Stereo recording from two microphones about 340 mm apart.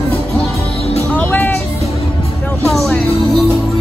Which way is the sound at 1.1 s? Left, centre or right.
Centre.